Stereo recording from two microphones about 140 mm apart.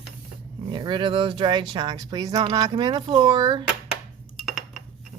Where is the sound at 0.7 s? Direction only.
35° right (ahead or behind).